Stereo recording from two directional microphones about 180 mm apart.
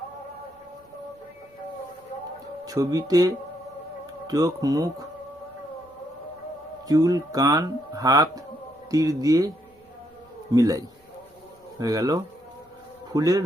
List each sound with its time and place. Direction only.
2.6 s speech: 20° right (ahead or behind)
6.8 s speech: 20° right (ahead or behind)
10.5 s speech: 20° right (ahead or behind)